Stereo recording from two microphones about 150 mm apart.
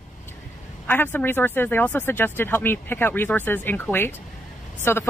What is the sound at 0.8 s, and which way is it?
Speech, 10° left (ahead or behind).